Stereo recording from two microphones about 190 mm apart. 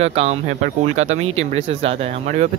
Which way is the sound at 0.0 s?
35° right (ahead or behind).